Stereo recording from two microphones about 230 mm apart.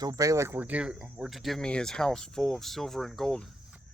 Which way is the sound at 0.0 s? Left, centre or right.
Centre.